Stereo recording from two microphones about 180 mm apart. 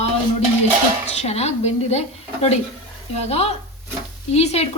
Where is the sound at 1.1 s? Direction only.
35° left (ahead or behind).